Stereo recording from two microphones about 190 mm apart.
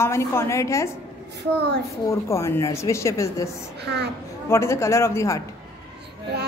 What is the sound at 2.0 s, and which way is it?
A woman's voice, 15° left (ahead or behind).